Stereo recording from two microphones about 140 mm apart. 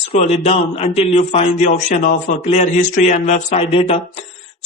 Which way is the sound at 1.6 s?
65° left (ahead or behind).